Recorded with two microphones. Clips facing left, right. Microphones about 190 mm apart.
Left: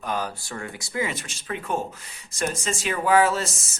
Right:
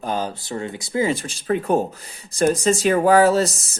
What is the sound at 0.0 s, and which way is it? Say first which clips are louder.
A man's voice: right 4 dB; 30° right (ahead or behind).